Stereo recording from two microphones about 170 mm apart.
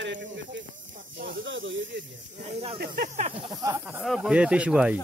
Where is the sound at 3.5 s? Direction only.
20° right (ahead or behind).